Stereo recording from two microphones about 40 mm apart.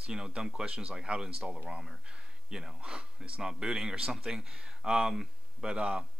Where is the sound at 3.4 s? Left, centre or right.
Centre.